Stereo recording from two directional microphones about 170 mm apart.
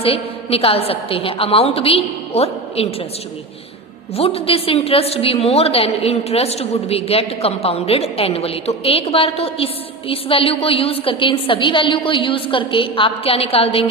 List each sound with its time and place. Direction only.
0.0 s a woman's voice: 35° left (ahead or behind)
4.1 s a woman's voice: 35° left (ahead or behind)